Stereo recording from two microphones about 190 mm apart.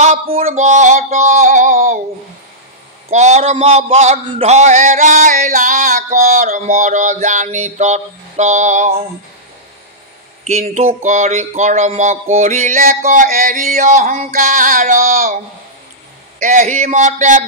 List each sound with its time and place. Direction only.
0.0 s a man's voice: 35° right (ahead or behind)
3.1 s a man's voice: 35° right (ahead or behind)
10.4 s a man's voice: 35° right (ahead or behind)
16.3 s a man's voice: 40° right (ahead or behind)